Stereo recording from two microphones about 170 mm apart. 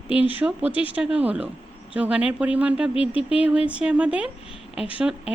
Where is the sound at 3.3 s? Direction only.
5° right (ahead or behind).